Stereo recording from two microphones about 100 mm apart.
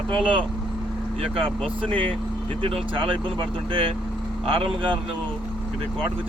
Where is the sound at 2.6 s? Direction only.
60° right (ahead or behind).